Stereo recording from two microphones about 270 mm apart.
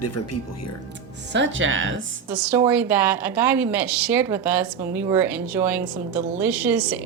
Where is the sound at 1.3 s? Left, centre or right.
Right.